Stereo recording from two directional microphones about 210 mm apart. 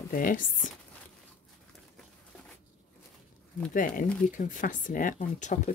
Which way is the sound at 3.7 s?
40° left (ahead or behind).